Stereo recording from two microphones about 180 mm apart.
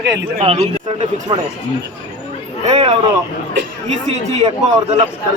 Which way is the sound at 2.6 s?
35° right (ahead or behind).